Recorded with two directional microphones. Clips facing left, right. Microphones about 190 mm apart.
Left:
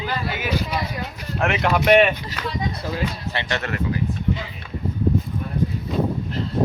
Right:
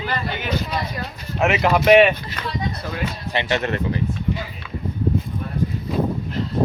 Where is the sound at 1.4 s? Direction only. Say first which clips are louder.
Right 3 dB; centre (ahead or behind).